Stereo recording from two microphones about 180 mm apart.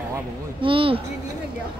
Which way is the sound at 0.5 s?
30° right (ahead or behind).